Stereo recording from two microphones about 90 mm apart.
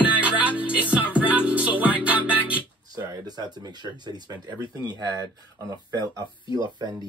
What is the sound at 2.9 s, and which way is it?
Speech, 45° right (ahead or behind).